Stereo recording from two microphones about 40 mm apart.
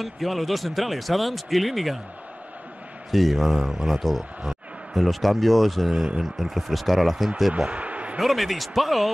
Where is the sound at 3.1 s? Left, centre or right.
Centre.